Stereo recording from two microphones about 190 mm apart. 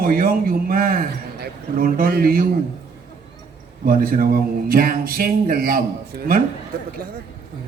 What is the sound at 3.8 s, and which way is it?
A man's voice, 50° right (ahead or behind).